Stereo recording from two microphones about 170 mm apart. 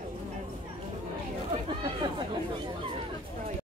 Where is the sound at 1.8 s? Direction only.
25° right (ahead or behind).